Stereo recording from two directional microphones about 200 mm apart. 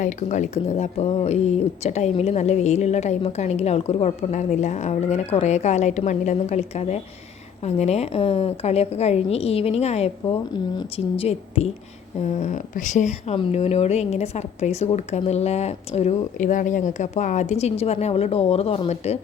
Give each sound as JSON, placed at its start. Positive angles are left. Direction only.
{"t": 0.0, "sound": "speech", "side_deg": 35}